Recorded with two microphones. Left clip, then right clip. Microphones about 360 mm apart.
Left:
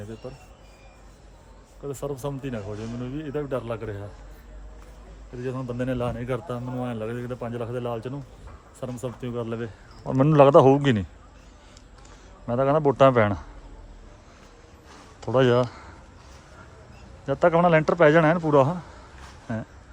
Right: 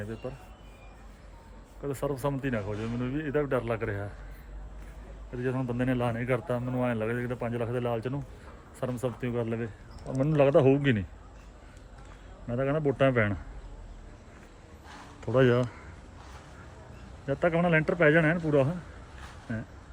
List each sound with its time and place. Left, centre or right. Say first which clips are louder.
1.9 s a man's voice: even; centre
5.4 s a man's voice: left 1 dB; centre
10.2 s speech: left 8 dB; centre
12.5 s a man's voice: left 7 dB; centre
15.2 s speech: left 4 dB; centre
17.2 s a man's voice: left 7 dB; centre